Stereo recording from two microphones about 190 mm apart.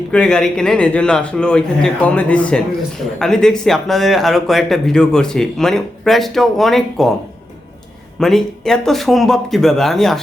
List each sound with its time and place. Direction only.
0.1 s speech: 5° left (ahead or behind)
8.2 s speech: centre (ahead or behind)